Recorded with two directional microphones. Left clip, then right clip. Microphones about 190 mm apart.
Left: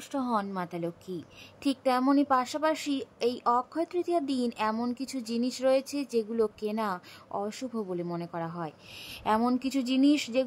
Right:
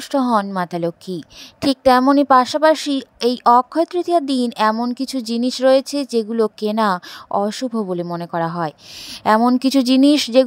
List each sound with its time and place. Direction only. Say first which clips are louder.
0.1 s speech: right 13 dB; 50° right (ahead or behind)